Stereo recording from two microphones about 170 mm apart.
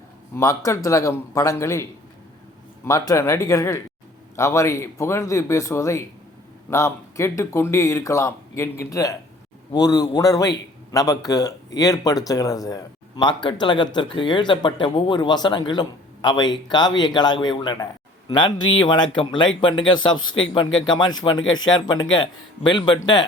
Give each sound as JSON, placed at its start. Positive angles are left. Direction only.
{"t": 0.3, "sound": "speech", "side_deg": 20}